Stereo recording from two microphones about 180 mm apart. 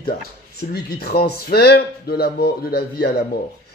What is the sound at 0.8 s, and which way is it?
Speech, 60° left (ahead or behind).